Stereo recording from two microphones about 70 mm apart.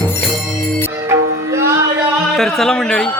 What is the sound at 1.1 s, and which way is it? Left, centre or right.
Music, right.